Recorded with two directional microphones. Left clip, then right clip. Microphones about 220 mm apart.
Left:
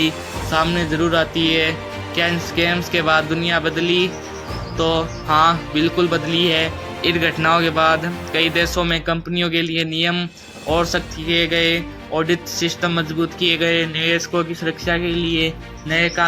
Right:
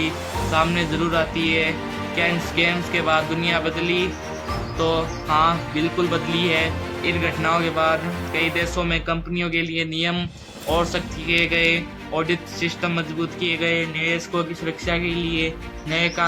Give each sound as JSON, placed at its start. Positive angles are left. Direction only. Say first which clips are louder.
{"t": 0.5, "sound": "speech", "louder": "left 3 dB", "side_deg": 15}